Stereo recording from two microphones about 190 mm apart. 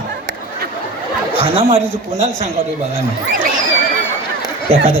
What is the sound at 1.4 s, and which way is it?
A man's voice, 30° right (ahead or behind).